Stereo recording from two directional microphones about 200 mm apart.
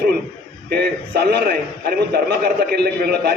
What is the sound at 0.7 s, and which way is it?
A man's voice, 50° right (ahead or behind).